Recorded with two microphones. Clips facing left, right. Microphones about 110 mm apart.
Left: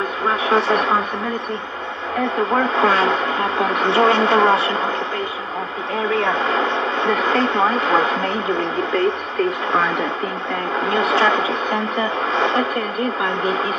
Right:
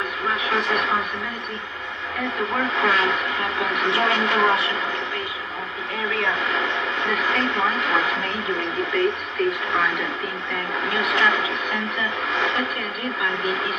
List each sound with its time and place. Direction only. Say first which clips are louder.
0.3 s speech: left 6 dB; 30° left (ahead or behind)
2.3 s speech: left 5 dB; 35° left (ahead or behind)
6.0 s speech: left 5 dB; 30° left (ahead or behind)